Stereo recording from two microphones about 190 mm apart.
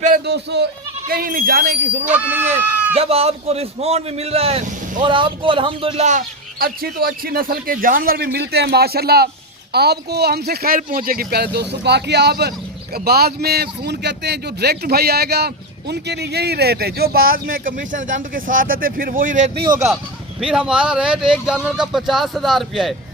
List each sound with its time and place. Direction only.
0.3 s speech: 60° right (ahead or behind)
1.0 s a man's voice: 50° right (ahead or behind)
2.0 s speech: 10° right (ahead or behind)
2.9 s a man's voice: 30° right (ahead or behind)
5.0 s a man's voice: 25° right (ahead or behind); by 19.6 s 45° right (ahead or behind)
20.4 s speech: 5° right (ahead or behind)